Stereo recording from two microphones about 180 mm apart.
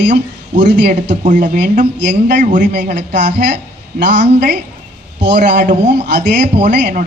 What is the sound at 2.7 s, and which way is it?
Speech, 75° right (ahead or behind).